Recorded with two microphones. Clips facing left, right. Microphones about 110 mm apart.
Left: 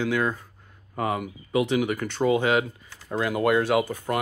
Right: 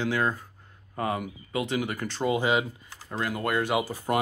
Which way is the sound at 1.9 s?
5° right (ahead or behind).